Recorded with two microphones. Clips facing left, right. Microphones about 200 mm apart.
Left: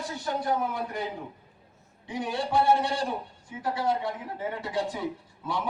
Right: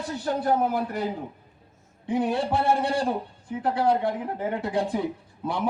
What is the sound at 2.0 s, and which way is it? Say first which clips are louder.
A man's voice: right 6 dB; 55° right (ahead or behind).